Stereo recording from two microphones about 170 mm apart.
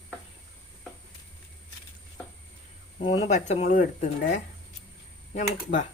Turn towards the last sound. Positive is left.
turn(degrees=45)  # may be behind; listen again after turning